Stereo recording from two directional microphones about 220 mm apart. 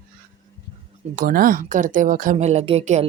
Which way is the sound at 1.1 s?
40° right (ahead or behind).